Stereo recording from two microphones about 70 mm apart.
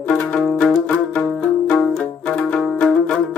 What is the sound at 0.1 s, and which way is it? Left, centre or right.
Music, centre.